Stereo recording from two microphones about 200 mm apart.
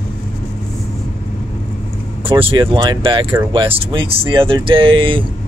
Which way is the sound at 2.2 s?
25° right (ahead or behind).